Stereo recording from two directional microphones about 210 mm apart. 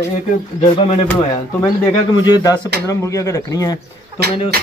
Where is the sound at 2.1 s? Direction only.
20° left (ahead or behind).